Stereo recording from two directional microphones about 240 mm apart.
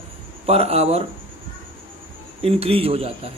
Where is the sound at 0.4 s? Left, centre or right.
Right.